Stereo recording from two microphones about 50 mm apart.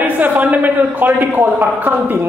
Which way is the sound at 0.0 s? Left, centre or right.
Right.